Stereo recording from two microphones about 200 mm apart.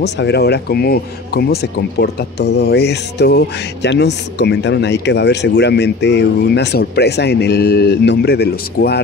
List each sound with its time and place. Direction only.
0.0 s speech: 55° left (ahead or behind)